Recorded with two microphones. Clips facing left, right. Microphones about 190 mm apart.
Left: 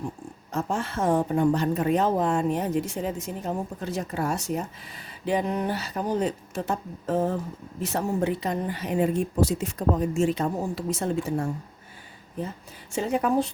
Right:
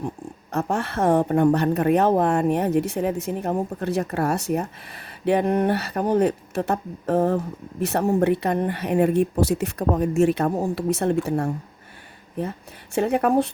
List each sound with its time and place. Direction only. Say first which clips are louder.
0.5 s a woman's voice: right 4 dB; 65° right (ahead or behind)